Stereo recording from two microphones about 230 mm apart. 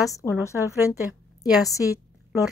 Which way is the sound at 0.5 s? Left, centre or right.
Centre.